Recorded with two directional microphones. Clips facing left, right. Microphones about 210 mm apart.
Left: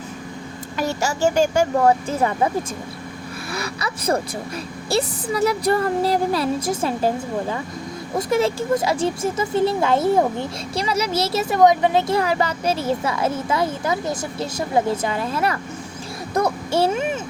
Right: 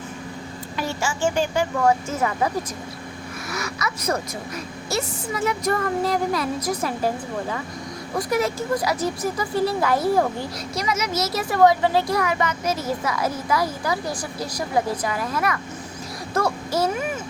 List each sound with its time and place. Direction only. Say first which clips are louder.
0.8 s a woman's voice: left 4 dB; 40° left (ahead or behind)
3.5 s a woman's voice: left 1 dB; 30° left (ahead or behind)
8.1 s a child's voice: left 3 dB; 25° left (ahead or behind)